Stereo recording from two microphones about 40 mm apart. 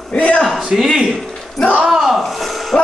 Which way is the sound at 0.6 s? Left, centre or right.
Centre.